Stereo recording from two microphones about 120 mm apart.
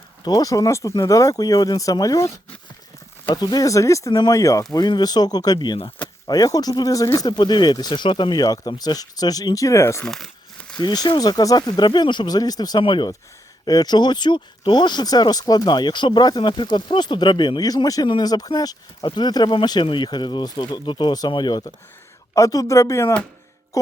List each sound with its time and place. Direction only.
0.3 s speech: 30° left (ahead or behind)
3.3 s speech: 35° left (ahead or behind)
10.0 s crumpling: centre (ahead or behind)
10.8 s speech: 35° left (ahead or behind)
22.4 s speech: 30° left (ahead or behind)
23.7 s music: 25° left (ahead or behind)